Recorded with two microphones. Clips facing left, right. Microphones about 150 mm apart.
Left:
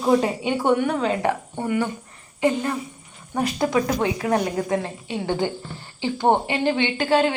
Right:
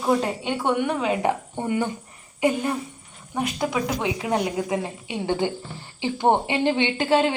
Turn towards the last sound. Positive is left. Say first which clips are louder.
# left 1 dB
turn(degrees=-25)  # may be behind; listen again after turning